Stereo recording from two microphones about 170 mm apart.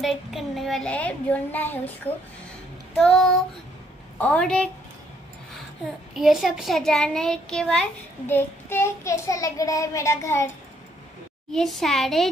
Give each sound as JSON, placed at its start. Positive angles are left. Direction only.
{"t": 0.0, "sound": "child singing", "side_deg": 0}
{"t": 3.0, "sound": "a child's voice", "side_deg": 0}
{"t": 6.1, "sound": "a child's voice", "side_deg": 0}
{"t": 8.3, "sound": "child singing", "side_deg": 15}
{"t": 11.5, "sound": "a child's voice", "side_deg": 0}